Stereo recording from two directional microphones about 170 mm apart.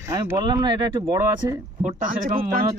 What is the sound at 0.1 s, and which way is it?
Speech, 20° right (ahead or behind).